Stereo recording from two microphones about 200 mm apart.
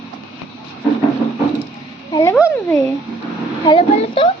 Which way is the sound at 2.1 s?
15° left (ahead or behind).